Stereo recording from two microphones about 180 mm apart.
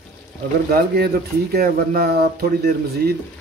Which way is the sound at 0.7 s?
60° right (ahead or behind).